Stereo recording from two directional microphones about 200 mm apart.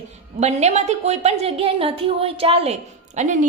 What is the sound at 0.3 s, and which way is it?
A woman's voice, 35° right (ahead or behind).